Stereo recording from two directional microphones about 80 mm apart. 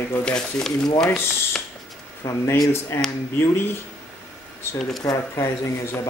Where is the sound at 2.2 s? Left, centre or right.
Left.